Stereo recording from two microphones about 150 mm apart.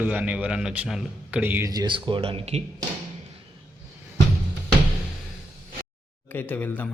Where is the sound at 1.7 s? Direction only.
30° right (ahead or behind).